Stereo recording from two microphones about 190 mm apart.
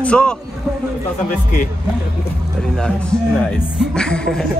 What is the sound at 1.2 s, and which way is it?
Speech, 45° left (ahead or behind).